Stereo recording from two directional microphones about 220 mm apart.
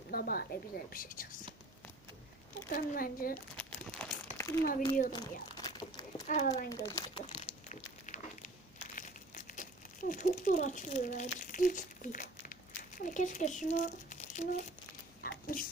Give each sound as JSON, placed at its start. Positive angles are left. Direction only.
{"t": 0.1, "sound": "a woman's voice", "side_deg": 40}
{"t": 2.6, "sound": "a woman's voice", "side_deg": 40}
{"t": 3.6, "sound": "crumpling", "side_deg": 5}
{"t": 4.4, "sound": "a sound", "side_deg": 10}
{"t": 6.2, "sound": "a child's voice", "side_deg": 35}
{"t": 6.5, "sound": "speech", "side_deg": 15}
{"t": 7.7, "sound": "a sound", "side_deg": 35}
{"t": 9.0, "sound": "crumpling", "side_deg": 35}
{"t": 10.1, "sound": "speech", "side_deg": 35}
{"t": 15.2, "sound": "a sound", "side_deg": 40}